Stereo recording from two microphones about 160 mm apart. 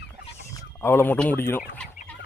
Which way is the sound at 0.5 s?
15° left (ahead or behind).